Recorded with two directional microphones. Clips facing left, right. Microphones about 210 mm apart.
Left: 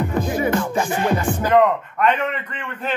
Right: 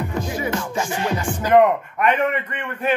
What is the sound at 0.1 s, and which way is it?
Music, 55° left (ahead or behind).